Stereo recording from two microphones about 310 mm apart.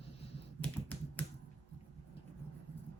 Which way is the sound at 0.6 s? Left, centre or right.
Centre.